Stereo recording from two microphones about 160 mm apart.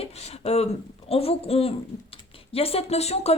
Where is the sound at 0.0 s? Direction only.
40° left (ahead or behind).